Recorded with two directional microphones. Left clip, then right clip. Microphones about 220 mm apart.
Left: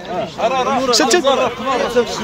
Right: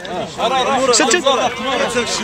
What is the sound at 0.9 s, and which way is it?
Speech, 25° left (ahead or behind).